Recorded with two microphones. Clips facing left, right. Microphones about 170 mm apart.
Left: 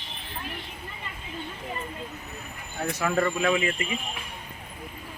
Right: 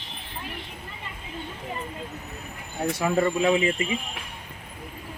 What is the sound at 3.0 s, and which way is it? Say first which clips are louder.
Speech: right 2 dB; 15° right (ahead or behind).